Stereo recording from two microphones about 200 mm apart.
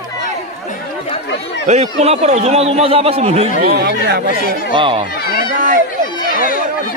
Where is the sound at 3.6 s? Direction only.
50° right (ahead or behind).